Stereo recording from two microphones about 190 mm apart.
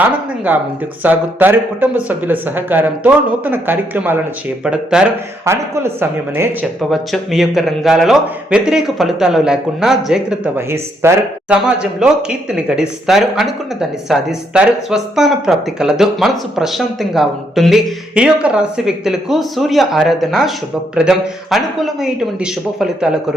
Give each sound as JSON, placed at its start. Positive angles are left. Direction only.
{"t": 0.0, "sound": "speech", "side_deg": -10}